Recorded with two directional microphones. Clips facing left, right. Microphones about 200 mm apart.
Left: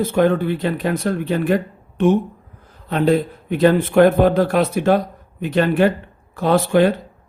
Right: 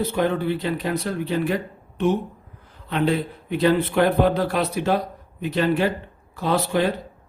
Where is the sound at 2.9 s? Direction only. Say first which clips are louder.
Left 5 dB; 40° left (ahead or behind).